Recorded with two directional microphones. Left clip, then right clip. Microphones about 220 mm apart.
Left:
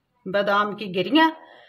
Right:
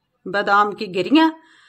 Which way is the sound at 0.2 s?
40° right (ahead or behind).